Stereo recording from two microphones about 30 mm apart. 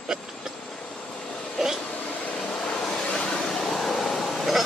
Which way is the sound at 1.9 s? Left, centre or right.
Left.